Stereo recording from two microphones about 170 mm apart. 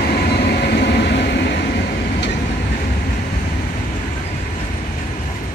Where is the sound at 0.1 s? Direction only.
70° left (ahead or behind).